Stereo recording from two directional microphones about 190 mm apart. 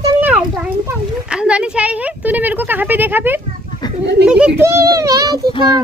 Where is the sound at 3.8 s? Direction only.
20° left (ahead or behind).